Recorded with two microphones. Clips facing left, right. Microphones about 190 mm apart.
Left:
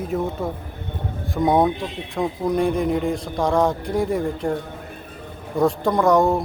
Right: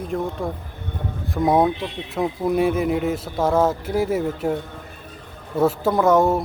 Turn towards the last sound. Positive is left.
turn(degrees=0)  # may be behind; listen again after turning